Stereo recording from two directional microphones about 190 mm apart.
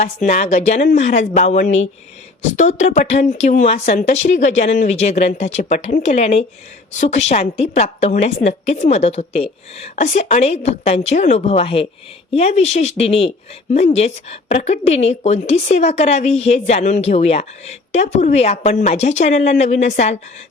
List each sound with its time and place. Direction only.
0.3 s speech: 40° left (ahead or behind)